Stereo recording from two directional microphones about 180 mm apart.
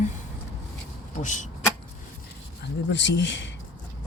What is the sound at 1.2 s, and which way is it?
Speech, 45° left (ahead or behind).